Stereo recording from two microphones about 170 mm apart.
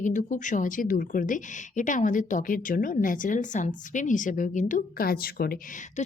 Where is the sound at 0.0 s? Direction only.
50° left (ahead or behind).